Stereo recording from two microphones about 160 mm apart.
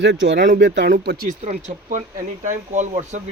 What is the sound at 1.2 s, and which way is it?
Speech, 50° right (ahead or behind).